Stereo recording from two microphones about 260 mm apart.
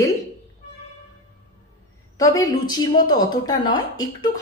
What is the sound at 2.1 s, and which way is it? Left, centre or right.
Speech, centre.